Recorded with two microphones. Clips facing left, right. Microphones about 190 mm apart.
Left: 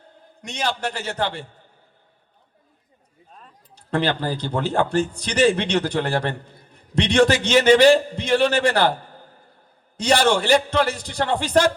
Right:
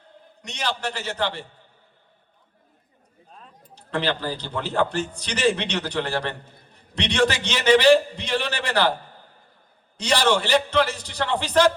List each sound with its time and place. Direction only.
0.4 s a man's voice: 50° left (ahead or behind)
3.8 s a man's voice: 50° left (ahead or behind)